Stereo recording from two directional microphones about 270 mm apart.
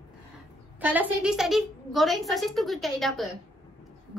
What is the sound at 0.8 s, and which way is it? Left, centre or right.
A woman's voice, centre.